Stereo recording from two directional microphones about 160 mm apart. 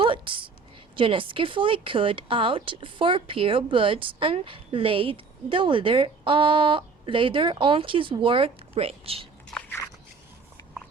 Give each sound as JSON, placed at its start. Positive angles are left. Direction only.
{"t": 0.0, "sound": "a sound", "side_deg": -30}
{"t": 0.9, "sound": "speech", "side_deg": -30}
{"t": 9.5, "sound": "biting", "side_deg": 5}